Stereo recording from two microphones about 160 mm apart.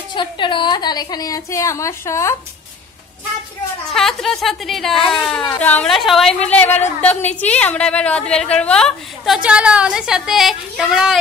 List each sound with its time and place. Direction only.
0.1 s a woman's voice: 30° left (ahead or behind)
3.9 s a woman's voice: 5° left (ahead or behind)